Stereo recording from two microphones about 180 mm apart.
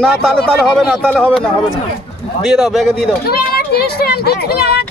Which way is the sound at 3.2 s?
60° left (ahead or behind).